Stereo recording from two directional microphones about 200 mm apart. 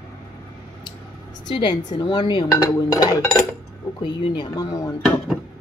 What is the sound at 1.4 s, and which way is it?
Speech, 20° left (ahead or behind).